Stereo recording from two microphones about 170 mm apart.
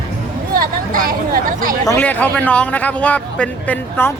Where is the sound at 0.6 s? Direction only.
60° right (ahead or behind).